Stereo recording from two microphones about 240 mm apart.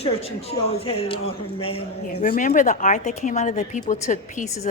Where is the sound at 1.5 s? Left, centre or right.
Left.